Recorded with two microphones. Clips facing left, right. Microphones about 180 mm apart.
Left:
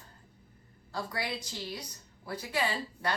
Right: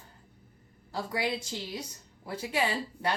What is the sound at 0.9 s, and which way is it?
A woman's voice, 20° right (ahead or behind).